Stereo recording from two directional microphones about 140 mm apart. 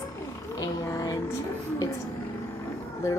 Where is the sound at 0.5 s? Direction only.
25° left (ahead or behind).